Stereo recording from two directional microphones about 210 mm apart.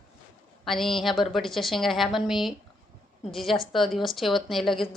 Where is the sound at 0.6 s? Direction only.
Centre (ahead or behind).